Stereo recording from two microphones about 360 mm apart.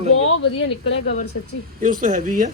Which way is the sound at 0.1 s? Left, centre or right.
Left.